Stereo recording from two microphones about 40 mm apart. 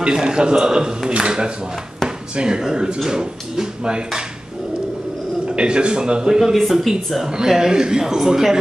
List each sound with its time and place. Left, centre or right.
0.0 s a man's voice: centre
5.6 s a man's voice: right
6.5 s a man's voice: centre